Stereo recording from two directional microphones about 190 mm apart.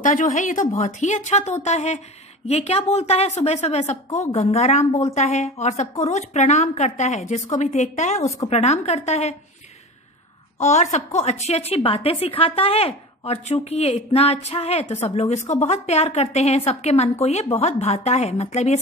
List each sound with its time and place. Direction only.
0.0 s a woman's voice: 45° left (ahead or behind)
10.6 s a woman's voice: 35° left (ahead or behind)